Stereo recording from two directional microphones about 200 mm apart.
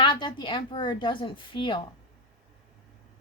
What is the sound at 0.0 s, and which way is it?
Speech, 25° left (ahead or behind).